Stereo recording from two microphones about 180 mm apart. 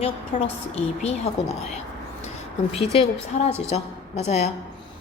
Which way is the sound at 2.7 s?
30° left (ahead or behind).